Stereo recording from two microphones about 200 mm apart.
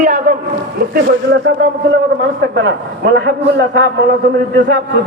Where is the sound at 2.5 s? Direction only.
60° right (ahead or behind).